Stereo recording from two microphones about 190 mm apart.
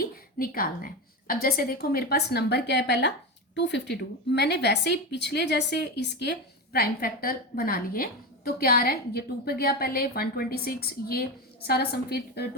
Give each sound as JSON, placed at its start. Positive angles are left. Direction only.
{"t": 0.0, "sound": "a sound", "side_deg": 50}
{"t": 1.3, "sound": "a woman's voice", "side_deg": 50}
{"t": 6.7, "sound": "a woman's voice", "side_deg": 50}